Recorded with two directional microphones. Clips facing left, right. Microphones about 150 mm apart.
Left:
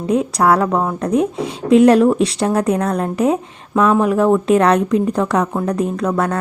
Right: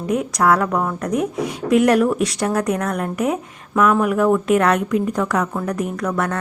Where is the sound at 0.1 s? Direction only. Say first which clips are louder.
Left 3 dB; 30° left (ahead or behind).